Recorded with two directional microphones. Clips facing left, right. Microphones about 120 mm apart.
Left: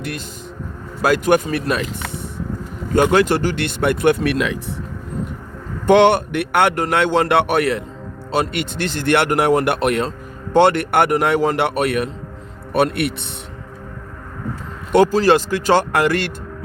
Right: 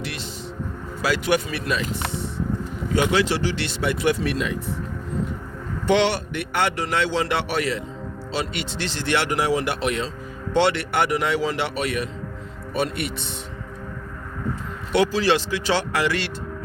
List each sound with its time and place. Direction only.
1.0 s a man's voice: 50° left (ahead or behind)
2.9 s a man's voice: 50° left (ahead or behind); by 4.5 s 75° left (ahead or behind)
5.8 s a man's voice: 50° left (ahead or behind)
14.9 s a man's voice: 45° left (ahead or behind)